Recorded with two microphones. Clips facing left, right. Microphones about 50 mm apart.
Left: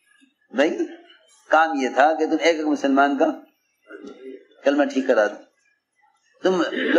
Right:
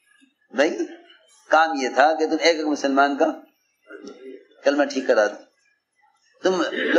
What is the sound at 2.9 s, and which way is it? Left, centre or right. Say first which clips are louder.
Speech: left 1 dB; left.